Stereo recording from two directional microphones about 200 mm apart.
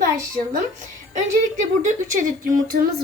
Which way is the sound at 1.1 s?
40° right (ahead or behind).